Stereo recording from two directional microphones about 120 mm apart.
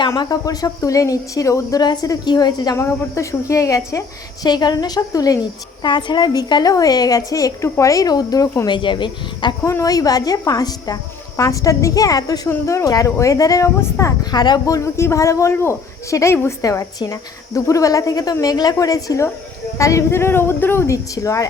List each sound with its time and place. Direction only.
0.2 s a woman's voice: 30° left (ahead or behind)
2.7 s a woman's voice: 25° left (ahead or behind); by 9.6 s 40° left (ahead or behind)
9.6 s a woman's voice: 25° left (ahead or behind)